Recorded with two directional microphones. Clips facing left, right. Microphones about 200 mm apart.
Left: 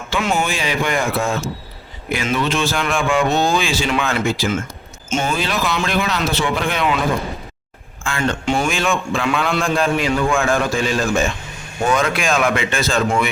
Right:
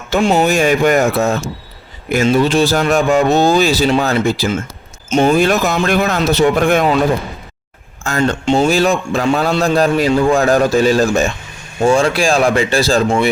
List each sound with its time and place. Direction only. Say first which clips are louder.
0.1 s a man's voice: right 8 dB; 35° right (ahead or behind)
5.2 s speech: right 10 dB; 50° right (ahead or behind)
8.0 s a man's voice: right 5 dB; 40° right (ahead or behind)